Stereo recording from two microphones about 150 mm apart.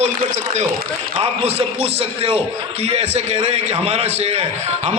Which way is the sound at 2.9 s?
45° right (ahead or behind).